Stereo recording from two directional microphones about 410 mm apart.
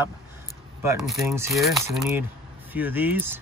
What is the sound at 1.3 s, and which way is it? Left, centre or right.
Speech, centre.